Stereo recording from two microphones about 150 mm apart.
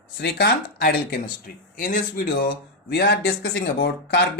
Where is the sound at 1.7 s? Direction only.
70° left (ahead or behind).